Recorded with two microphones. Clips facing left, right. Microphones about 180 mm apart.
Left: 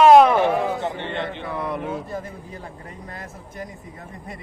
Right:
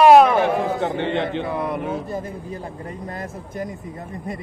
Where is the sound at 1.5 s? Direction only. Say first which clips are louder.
Right 3 dB; 10° right (ahead or behind).